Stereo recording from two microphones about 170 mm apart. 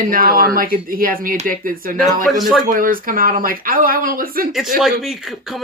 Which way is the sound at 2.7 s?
55° right (ahead or behind).